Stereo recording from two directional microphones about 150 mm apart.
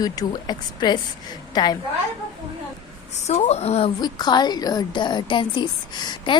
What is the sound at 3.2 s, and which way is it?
Speech, 45° left (ahead or behind).